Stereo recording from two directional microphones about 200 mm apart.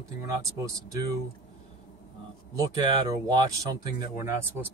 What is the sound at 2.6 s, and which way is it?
Speech, 20° right (ahead or behind).